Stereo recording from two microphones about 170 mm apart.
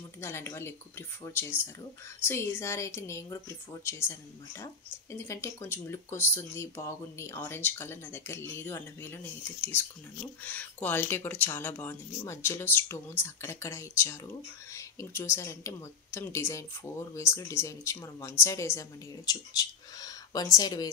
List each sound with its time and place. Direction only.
0.2 s speech: 15° left (ahead or behind)
5.1 s speech: 15° left (ahead or behind)